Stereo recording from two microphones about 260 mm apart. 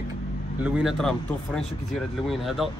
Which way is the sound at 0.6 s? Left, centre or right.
Centre.